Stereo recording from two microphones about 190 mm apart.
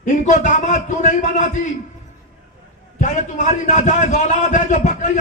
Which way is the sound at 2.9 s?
40° left (ahead or behind).